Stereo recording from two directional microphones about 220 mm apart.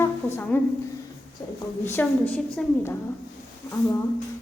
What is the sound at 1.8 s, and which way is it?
A woman's voice, 10° left (ahead or behind).